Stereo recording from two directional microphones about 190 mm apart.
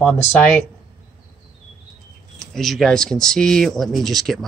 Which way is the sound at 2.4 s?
Centre (ahead or behind).